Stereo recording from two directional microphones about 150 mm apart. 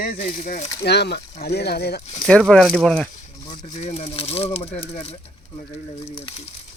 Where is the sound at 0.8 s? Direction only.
90° left.